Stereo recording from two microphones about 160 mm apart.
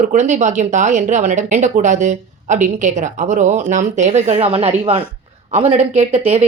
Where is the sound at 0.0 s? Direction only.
50° right (ahead or behind).